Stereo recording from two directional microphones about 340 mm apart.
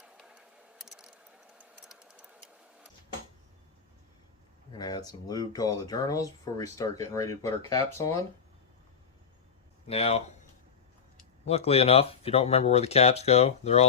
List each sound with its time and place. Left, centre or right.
0.0 s a sound: centre
4.7 s speech: centre
9.8 s speech: centre
11.4 s speech: centre